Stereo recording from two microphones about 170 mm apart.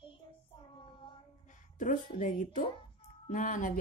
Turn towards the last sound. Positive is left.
turn(degrees=50)  # may be behind; listen again after turning